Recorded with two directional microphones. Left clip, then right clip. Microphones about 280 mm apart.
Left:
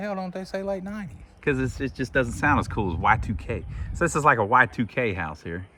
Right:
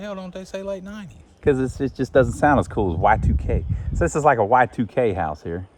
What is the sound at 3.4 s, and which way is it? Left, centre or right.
Speech, centre.